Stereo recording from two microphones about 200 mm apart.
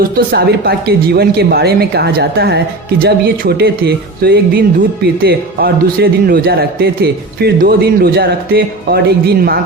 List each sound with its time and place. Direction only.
0.3 s a man's voice: 50° right (ahead or behind)